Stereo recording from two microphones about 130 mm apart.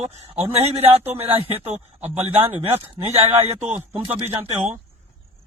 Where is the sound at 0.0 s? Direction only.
60° right (ahead or behind).